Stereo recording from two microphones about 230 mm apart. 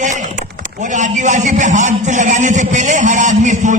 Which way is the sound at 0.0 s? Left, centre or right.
Right.